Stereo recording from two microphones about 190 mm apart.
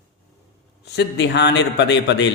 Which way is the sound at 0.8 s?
65° left (ahead or behind).